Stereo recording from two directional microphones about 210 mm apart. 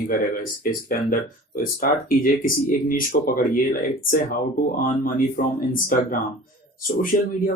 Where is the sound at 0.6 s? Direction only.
40° left (ahead or behind).